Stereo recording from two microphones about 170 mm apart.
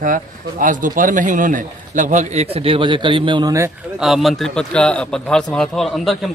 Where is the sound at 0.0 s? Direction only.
50° right (ahead or behind); by 3.5 s 30° right (ahead or behind).